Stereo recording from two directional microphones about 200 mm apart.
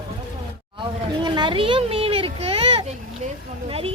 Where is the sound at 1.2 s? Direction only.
25° right (ahead or behind).